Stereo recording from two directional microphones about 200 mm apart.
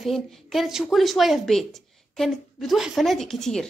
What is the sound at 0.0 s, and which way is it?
A woman's voice, centre (ahead or behind).